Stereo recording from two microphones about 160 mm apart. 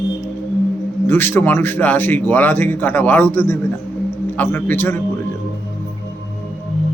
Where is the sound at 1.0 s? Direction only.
15° left (ahead or behind).